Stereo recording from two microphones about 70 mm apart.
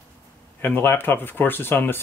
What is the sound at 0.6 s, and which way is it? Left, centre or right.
Speech, left.